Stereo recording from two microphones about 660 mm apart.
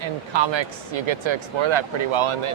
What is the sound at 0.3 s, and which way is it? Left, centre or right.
Speech, right.